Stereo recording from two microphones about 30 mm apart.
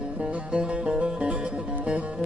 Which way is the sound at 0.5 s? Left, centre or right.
Right.